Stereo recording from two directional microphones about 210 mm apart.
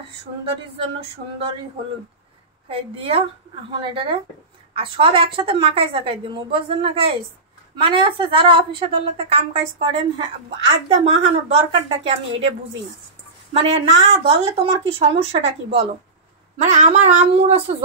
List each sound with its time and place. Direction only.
0.2 s a woman's voice: 30° right (ahead or behind)
2.7 s a woman's voice: 25° right (ahead or behind)
13.5 s a woman's voice: 30° right (ahead or behind)